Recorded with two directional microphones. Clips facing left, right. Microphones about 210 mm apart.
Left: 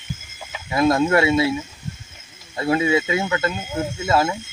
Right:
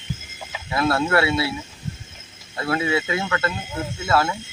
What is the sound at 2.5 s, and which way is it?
Speech, 15° left (ahead or behind).